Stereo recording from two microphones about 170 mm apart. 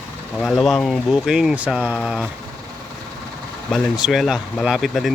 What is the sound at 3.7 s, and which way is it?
Speech, centre (ahead or behind).